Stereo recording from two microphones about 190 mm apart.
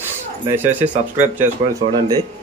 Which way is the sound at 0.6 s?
10° right (ahead or behind).